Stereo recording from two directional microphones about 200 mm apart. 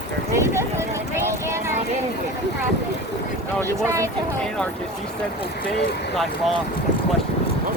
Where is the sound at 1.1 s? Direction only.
15° right (ahead or behind).